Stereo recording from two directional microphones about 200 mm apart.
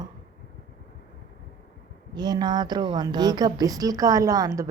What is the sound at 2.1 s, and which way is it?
A woman's voice, 20° right (ahead or behind).